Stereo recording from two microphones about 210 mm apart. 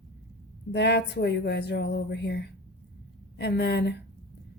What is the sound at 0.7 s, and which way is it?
Speech, 55° left (ahead or behind).